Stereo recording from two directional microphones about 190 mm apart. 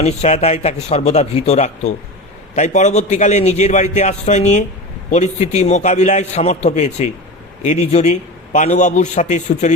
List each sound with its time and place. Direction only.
0.0 s a man's voice: 35° left (ahead or behind)